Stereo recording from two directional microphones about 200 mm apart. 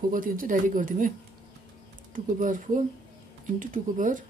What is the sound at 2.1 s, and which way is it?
Speech, 40° right (ahead or behind).